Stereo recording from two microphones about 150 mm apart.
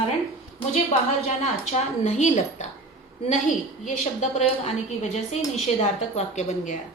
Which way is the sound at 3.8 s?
55° left (ahead or behind).